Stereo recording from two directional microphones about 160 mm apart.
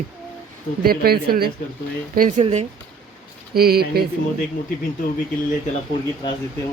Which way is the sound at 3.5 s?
75° right (ahead or behind).